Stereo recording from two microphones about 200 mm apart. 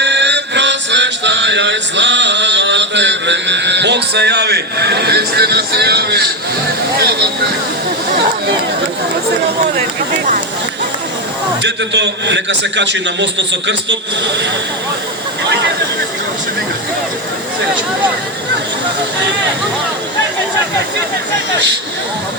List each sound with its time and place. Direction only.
0.0 s music: 60° right (ahead or behind)
11.6 s a man's voice: 60° right (ahead or behind)
15.4 s speech: 60° right (ahead or behind)